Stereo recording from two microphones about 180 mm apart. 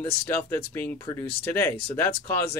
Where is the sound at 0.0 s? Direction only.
10° left (ahead or behind).